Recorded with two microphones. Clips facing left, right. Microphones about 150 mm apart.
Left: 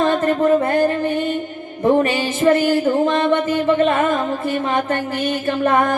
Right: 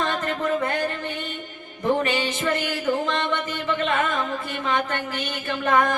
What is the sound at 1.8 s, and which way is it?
Music, 45° left (ahead or behind).